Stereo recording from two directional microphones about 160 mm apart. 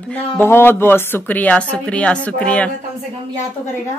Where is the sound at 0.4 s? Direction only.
15° left (ahead or behind).